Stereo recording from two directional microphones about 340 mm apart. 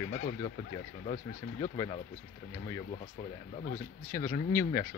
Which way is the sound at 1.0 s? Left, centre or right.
Centre.